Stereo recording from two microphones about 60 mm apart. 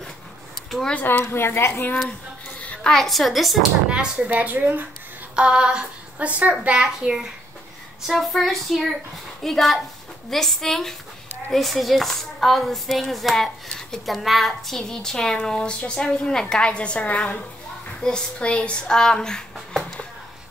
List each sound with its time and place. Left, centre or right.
1.2 s a woman's voice: left
2.9 s speech: centre
3.9 s female singing: centre
4.3 s a woman's voice: right
5.3 s female singing: centre
6.1 s a woman's voice: right
8.1 s a woman's voice: centre